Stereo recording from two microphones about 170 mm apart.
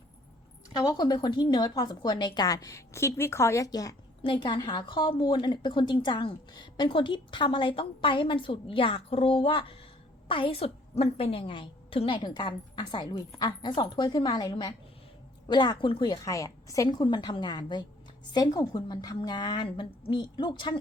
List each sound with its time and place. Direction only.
0.8 s a woman's voice: 25° left (ahead or behind)